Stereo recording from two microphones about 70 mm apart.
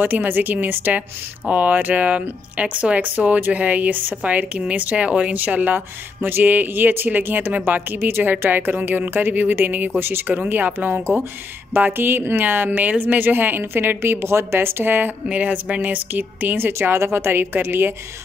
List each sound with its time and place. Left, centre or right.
0.0 s a woman's voice: right